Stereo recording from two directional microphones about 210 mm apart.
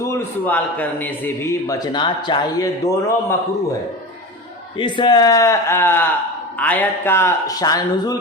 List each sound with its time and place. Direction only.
0.0 s a man's voice: 10° left (ahead or behind)
4.8 s a man's voice: 20° left (ahead or behind)